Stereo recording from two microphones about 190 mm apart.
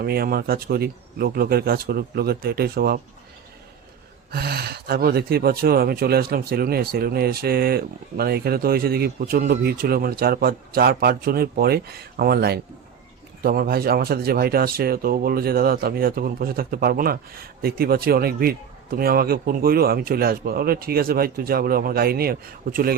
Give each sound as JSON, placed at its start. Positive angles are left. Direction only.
{"t": 0.0, "sound": "speech", "side_deg": -55}
{"t": 4.3, "sound": "speech", "side_deg": -55}